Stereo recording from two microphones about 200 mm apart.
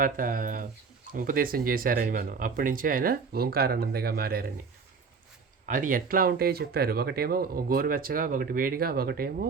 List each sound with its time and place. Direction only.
0.0 s speech: 45° right (ahead or behind)
5.6 s speech: 40° right (ahead or behind)